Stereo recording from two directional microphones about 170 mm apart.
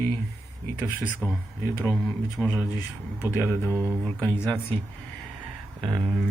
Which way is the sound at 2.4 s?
Centre (ahead or behind).